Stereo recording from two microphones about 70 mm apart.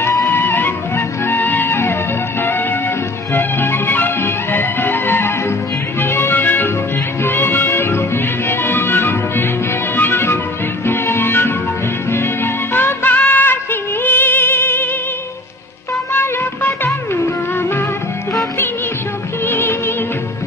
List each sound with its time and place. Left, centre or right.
0.3 s music: left
3.3 s music: left
12.7 s music: left
16.1 s music: left
19.4 s music: left